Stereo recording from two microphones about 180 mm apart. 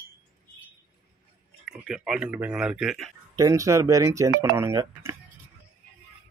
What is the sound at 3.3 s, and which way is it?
Speech, 15° right (ahead or behind).